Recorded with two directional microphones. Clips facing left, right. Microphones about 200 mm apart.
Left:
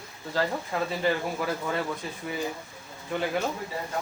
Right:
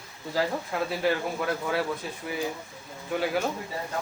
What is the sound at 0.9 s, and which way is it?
Speech, centre (ahead or behind).